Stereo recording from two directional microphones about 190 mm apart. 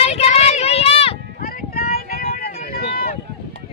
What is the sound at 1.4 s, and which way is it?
Vehicle, 50° left (ahead or behind).